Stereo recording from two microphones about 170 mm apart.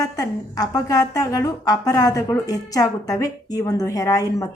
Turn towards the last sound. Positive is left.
turn(degrees=20)  # may be behind; listen again after turning